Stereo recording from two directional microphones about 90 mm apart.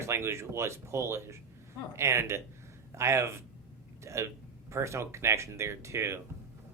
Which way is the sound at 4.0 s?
35° right (ahead or behind).